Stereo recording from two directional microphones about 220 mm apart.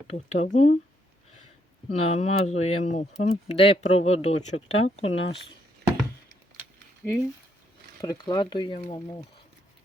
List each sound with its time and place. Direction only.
0.1 s speech: 30° left (ahead or behind)
1.9 s speech: 30° left (ahead or behind)
7.0 s speech: 5° left (ahead or behind)
8.0 s speech: 20° left (ahead or behind)